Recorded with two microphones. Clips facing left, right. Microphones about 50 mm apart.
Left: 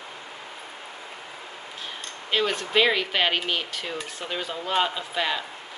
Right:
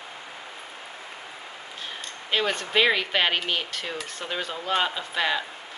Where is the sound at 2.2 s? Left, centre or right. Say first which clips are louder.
Left 1 dB; centre.